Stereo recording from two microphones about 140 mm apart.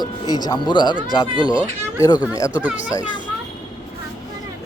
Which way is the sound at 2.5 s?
10° right (ahead or behind).